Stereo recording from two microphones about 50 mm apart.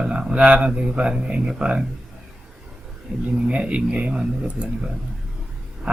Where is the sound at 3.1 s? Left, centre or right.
Right.